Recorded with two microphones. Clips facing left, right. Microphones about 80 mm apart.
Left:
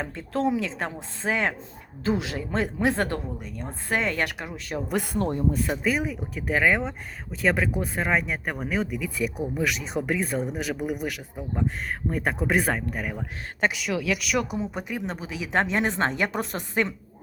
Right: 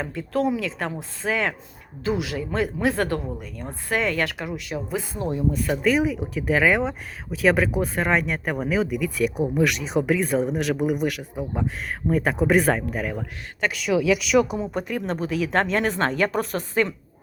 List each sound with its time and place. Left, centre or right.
0.0 s a woman's voice: left
4.5 s speech: left
4.9 s speech: left
5.7 s a woman's voice: centre; by 16.9 s left